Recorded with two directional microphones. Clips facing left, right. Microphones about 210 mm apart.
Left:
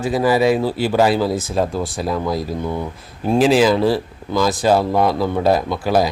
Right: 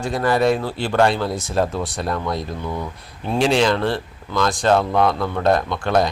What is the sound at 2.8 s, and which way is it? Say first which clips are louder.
Speech: left 4 dB; 30° left (ahead or behind).